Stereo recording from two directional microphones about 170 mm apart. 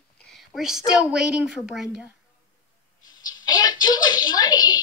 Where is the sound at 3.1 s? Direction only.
25° left (ahead or behind).